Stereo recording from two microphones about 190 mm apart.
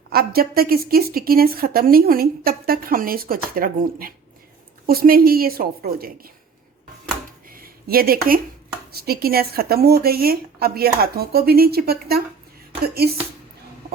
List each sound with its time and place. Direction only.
0.1 s a woman's voice: 50° right (ahead or behind)
7.4 s a sound: 50° right (ahead or behind)
8.9 s a woman's voice: 55° right (ahead or behind)